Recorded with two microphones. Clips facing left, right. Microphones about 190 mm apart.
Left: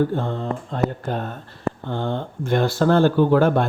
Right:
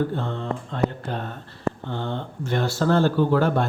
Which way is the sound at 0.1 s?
40° left (ahead or behind).